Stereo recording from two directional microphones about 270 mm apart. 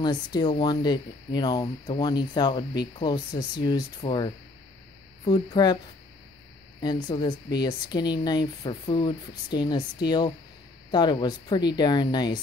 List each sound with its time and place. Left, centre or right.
0.0 s speech: centre
6.8 s speech: centre